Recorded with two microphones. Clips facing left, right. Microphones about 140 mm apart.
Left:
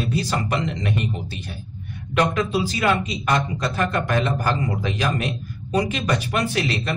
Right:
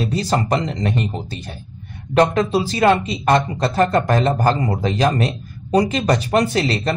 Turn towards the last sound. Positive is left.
turn(degrees=-35)  # may be behind; listen again after turning